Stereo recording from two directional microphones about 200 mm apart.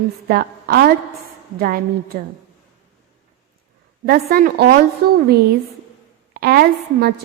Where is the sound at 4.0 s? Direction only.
50° right (ahead or behind).